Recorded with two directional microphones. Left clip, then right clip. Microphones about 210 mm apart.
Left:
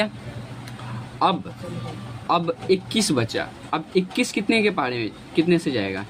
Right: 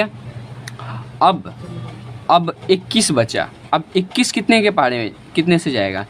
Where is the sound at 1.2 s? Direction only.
30° right (ahead or behind).